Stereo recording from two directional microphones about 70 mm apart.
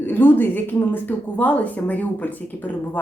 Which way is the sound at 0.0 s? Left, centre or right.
Left.